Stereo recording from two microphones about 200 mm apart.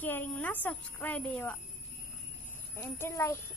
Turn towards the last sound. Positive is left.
turn(degrees=10)  # may be behind; listen again after turning